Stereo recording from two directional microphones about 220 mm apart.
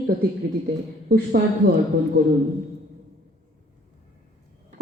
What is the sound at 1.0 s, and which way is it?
Speech, 45° right (ahead or behind).